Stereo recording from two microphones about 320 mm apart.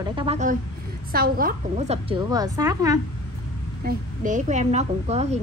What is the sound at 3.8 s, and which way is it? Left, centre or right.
A woman's voice, right.